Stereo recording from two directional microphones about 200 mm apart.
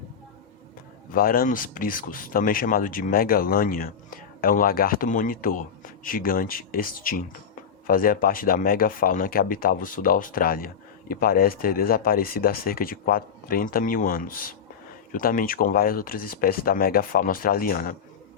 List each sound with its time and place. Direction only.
1.1 s speech: 45° left (ahead or behind)